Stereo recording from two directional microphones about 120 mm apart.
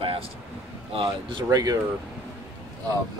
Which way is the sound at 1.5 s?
30° right (ahead or behind).